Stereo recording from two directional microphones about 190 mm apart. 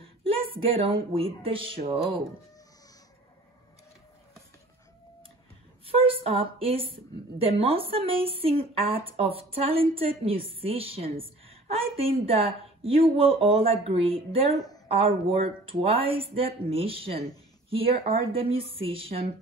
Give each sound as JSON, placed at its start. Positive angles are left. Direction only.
{"t": 0.0, "sound": "speech", "side_deg": -30}
{"t": 5.9, "sound": "a woman's voice", "side_deg": -30}